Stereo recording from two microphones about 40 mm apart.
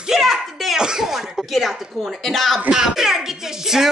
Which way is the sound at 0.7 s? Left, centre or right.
Centre.